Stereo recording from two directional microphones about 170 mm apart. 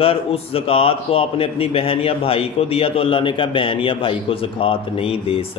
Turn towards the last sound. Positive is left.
turn(degrees=35)  # may be behind; listen again after turning